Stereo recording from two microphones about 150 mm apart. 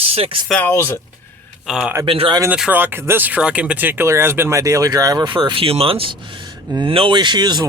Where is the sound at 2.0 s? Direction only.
35° right (ahead or behind).